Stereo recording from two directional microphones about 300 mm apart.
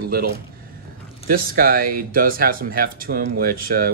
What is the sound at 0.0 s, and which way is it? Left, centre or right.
Speech, right.